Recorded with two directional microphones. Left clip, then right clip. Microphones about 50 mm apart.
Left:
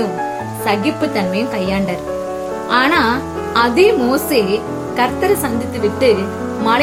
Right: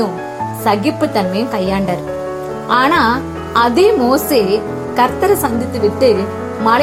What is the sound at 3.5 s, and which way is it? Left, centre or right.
A woman's voice, right.